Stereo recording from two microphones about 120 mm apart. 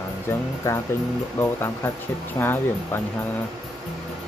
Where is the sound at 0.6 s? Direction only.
25° left (ahead or behind).